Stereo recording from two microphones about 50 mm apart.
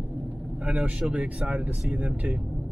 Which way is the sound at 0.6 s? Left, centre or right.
Right.